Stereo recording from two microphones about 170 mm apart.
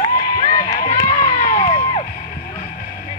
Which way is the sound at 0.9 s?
20° left (ahead or behind).